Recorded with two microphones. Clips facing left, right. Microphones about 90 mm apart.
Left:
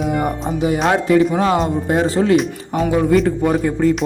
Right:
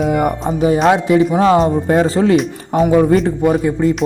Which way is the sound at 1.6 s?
40° right (ahead or behind).